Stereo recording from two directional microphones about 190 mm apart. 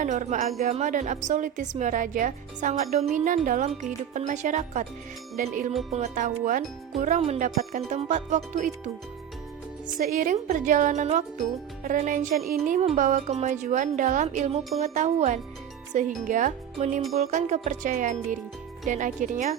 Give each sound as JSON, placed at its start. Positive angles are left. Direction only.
{"t": 0.0, "sound": "a woman's voice", "side_deg": -40}
{"t": 10.0, "sound": "a woman's voice", "side_deg": -45}